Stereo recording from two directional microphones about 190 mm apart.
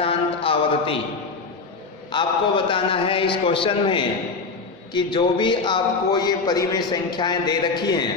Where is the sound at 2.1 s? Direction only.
25° left (ahead or behind).